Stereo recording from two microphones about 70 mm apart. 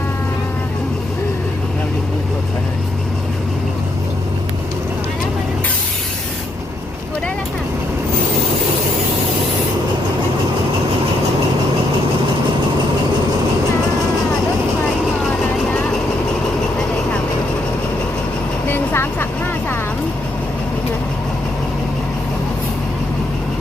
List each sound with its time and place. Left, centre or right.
18.7 s vehicle: left